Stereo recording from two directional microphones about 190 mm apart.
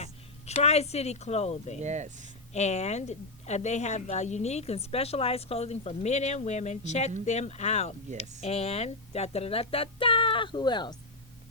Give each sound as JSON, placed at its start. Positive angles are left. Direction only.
{"t": 0.0, "sound": "speech", "side_deg": 35}
{"t": 1.8, "sound": "speech", "side_deg": -40}
{"t": 2.5, "sound": "a woman's voice", "side_deg": 35}